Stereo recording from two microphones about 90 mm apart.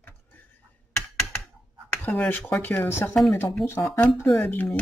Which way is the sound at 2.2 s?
25° left (ahead or behind).